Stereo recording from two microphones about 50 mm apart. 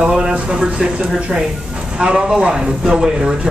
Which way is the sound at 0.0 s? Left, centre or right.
Centre.